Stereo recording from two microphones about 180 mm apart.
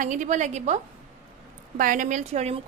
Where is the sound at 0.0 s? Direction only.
45° right (ahead or behind).